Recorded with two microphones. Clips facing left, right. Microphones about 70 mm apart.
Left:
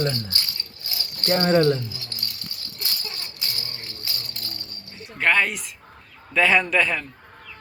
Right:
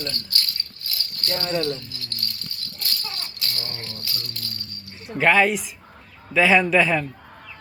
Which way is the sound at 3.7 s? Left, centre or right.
Left.